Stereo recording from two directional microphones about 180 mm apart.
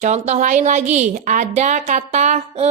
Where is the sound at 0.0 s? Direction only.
40° right (ahead or behind).